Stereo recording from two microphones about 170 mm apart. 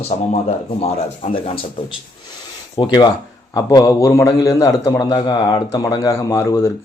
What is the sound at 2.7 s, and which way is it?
A man's voice, 25° left (ahead or behind).